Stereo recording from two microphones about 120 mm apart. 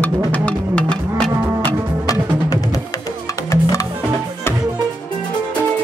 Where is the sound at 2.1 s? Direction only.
30° left (ahead or behind).